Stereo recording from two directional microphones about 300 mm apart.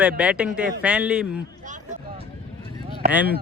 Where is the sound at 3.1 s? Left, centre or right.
Centre.